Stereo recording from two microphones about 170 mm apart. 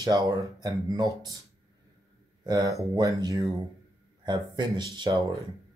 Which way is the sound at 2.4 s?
20° right (ahead or behind).